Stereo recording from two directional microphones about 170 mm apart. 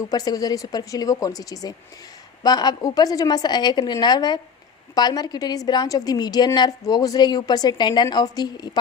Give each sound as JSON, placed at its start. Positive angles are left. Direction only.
{"t": 0.0, "sound": "a woman's voice", "side_deg": 20}